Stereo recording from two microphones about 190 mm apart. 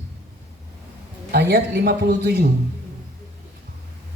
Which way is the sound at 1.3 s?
60° right (ahead or behind).